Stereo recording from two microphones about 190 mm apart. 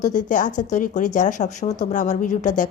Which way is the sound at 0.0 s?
40° left (ahead or behind).